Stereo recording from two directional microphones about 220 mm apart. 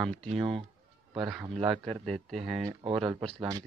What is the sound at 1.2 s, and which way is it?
Speech, centre (ahead or behind).